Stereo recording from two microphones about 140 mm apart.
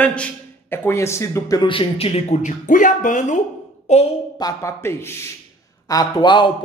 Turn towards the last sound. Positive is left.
turn(degrees=35)  # may be behind; listen again after turning